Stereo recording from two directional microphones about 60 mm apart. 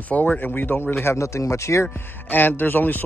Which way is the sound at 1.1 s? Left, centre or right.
Left.